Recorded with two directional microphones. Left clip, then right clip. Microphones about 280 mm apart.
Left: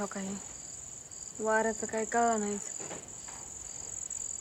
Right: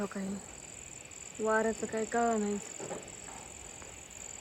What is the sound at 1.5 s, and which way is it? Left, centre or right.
Speech, centre.